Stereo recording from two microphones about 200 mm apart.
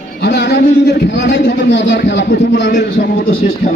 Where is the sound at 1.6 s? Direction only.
65° left (ahead or behind).